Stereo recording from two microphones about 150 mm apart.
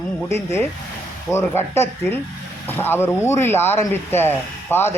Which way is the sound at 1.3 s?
15° left (ahead or behind).